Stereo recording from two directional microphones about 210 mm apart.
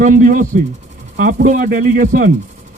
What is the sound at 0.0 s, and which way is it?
Speech, 40° right (ahead or behind).